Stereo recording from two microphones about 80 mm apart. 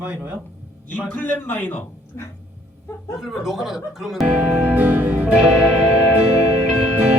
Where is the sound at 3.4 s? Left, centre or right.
Centre.